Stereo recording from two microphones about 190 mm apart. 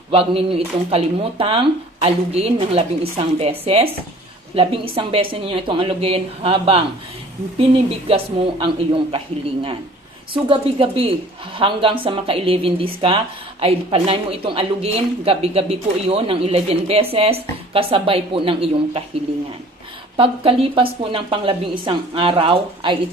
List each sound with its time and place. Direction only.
0.1 s a woman's voice: 30° right (ahead or behind)
8.0 s a woman's voice: 30° right (ahead or behind)
10.3 s a woman's voice: 30° right (ahead or behind)
20.1 s a woman's voice: 30° right (ahead or behind)